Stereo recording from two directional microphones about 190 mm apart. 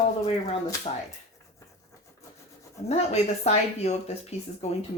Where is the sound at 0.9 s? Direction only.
30° left (ahead or behind).